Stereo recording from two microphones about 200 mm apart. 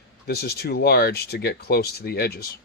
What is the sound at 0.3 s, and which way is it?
Speech, 50° left (ahead or behind).